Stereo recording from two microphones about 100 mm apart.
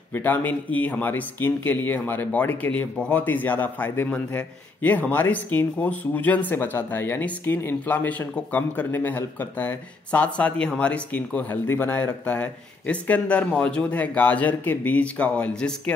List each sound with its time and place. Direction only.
0.1 s speech: 20° left (ahead or behind)